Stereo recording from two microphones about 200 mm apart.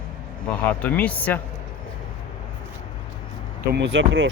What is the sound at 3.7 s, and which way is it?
Speech, 60° right (ahead or behind).